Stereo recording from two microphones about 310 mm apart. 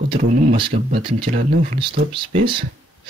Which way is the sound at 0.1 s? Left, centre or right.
Centre.